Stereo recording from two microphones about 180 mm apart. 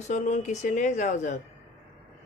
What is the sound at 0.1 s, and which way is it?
Speech, 40° left (ahead or behind).